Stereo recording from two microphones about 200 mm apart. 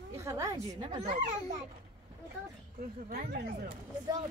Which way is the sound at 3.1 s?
50° right (ahead or behind).